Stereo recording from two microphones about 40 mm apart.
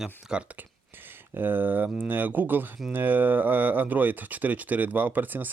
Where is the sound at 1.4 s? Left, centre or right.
Right.